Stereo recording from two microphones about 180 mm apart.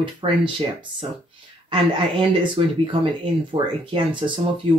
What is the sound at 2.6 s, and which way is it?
Speech, 30° right (ahead or behind).